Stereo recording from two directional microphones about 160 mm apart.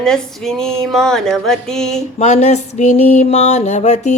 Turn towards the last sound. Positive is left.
turn(degrees=45)  # may be behind; listen again after turning